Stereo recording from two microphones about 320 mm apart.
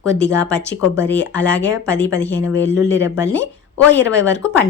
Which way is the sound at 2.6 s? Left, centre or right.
Left.